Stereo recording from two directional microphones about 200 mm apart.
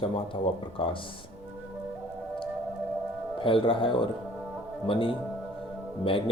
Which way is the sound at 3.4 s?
25° left (ahead or behind).